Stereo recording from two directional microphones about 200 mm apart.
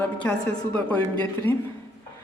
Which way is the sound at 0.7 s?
5° left (ahead or behind).